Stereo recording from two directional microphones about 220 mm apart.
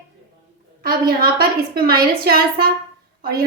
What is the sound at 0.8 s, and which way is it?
A woman's voice, 40° right (ahead or behind).